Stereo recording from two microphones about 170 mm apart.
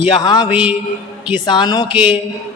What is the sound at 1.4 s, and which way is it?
Speech, 25° left (ahead or behind).